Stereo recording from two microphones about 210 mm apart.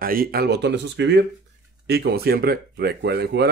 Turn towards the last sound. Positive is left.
turn(degrees=-50)  # may be behind; listen again after turning